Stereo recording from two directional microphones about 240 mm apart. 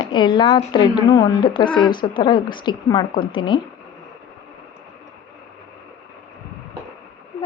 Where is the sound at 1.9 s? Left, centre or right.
Centre.